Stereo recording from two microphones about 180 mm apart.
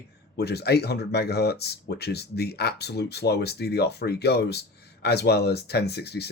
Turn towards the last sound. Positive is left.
turn(degrees=65)  # may be behind; listen again after turning